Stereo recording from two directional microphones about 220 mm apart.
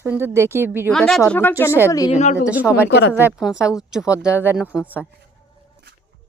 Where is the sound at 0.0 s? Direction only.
10° right (ahead or behind).